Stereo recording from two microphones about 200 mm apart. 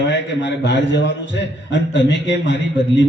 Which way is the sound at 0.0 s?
65° left (ahead or behind).